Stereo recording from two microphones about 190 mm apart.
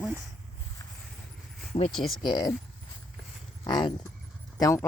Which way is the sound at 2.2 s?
20° left (ahead or behind).